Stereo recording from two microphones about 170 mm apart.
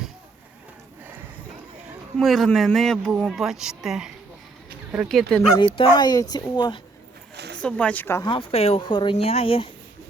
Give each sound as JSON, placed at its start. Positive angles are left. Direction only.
{"t": 2.1, "sound": "speech", "side_deg": 0}
{"t": 5.5, "sound": "speech", "side_deg": 30}
{"t": 7.3, "sound": "a sound", "side_deg": -75}
{"t": 7.6, "sound": "speech", "side_deg": 5}
{"t": 8.3, "sound": "speech", "side_deg": 35}